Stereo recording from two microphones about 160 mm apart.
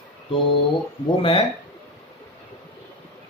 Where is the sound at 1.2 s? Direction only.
30° left (ahead or behind).